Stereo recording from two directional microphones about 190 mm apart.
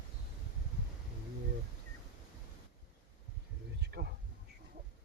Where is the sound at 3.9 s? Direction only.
55° right (ahead or behind).